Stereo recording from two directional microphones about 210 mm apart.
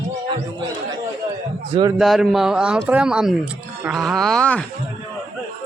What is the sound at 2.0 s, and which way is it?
Speech, centre (ahead or behind).